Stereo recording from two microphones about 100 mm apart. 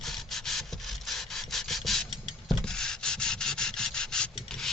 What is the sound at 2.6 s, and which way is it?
Rub, 5° left (ahead or behind).